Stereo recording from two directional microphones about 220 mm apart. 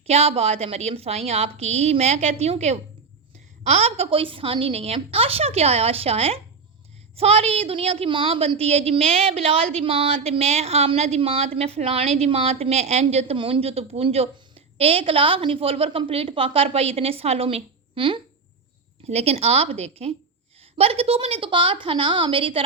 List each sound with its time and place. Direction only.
0.1 s speech: 30° right (ahead or behind)